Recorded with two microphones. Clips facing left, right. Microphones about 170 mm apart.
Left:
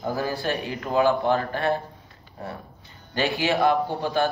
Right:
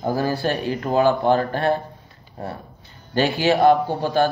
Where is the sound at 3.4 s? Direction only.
30° right (ahead or behind).